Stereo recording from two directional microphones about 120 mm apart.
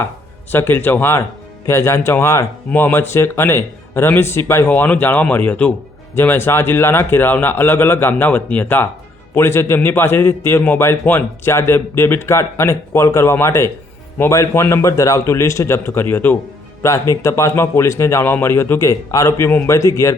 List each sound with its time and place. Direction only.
0.5 s a man's voice: 15° left (ahead or behind)